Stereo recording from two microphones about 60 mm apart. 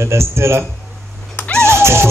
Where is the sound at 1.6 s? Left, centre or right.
Right.